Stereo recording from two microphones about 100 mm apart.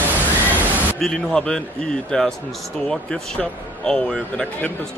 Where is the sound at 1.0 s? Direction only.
5° left (ahead or behind).